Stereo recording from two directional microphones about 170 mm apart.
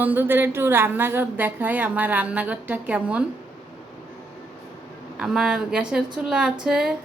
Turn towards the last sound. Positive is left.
turn(degrees=-5)  # may be behind; listen again after turning